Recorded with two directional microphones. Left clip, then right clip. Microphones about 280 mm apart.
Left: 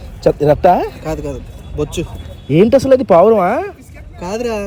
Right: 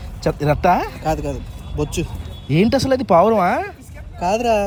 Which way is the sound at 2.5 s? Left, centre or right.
Centre.